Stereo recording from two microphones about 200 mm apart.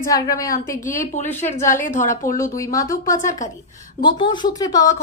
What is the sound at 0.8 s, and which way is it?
Speech, 40° left (ahead or behind).